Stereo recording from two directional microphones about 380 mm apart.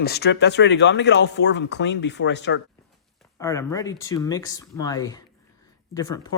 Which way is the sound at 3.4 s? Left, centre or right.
Centre.